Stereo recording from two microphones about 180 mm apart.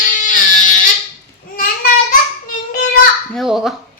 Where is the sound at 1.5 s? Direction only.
50° left (ahead or behind).